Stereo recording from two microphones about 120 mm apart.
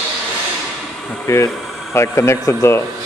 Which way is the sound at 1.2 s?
25° left (ahead or behind).